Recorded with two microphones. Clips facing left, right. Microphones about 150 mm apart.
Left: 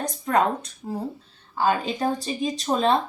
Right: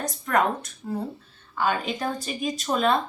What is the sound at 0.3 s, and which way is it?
Speech, 25° left (ahead or behind).